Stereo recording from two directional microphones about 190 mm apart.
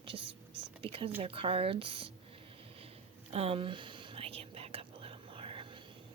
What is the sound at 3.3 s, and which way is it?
Whispering, 30° right (ahead or behind).